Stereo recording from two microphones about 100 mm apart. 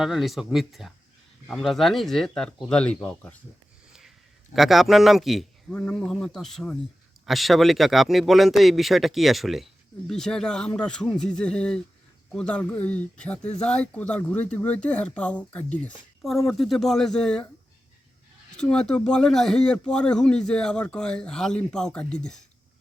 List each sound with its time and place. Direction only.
0.0 s speech: 5° right (ahead or behind); by 3.4 s 15° left (ahead or behind)
4.5 s speech: centre (ahead or behind)
16.2 s speech: centre (ahead or behind)
18.5 s speech: 10° left (ahead or behind)